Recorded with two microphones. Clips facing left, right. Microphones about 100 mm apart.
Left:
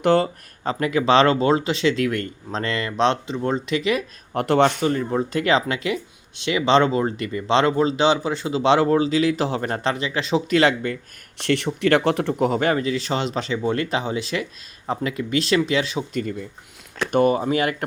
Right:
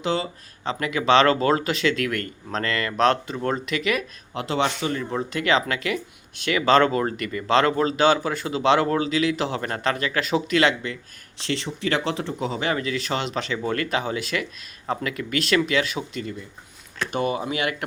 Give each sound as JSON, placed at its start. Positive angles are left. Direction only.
{"t": 0.0, "sound": "speech", "side_deg": 55}
{"t": 0.7, "sound": "speech", "side_deg": 35}
{"t": 4.4, "sound": "speech", "side_deg": 55}
{"t": 4.8, "sound": "speech", "side_deg": 35}
{"t": 11.3, "sound": "speech", "side_deg": 60}
{"t": 12.7, "sound": "speech", "side_deg": 35}
{"t": 17.1, "sound": "speech", "side_deg": 45}